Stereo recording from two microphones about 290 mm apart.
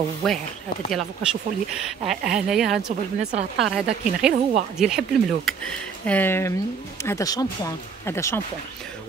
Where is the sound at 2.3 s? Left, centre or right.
Centre.